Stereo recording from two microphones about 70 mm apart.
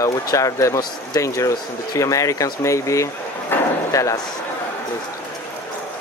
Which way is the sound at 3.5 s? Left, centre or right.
Left.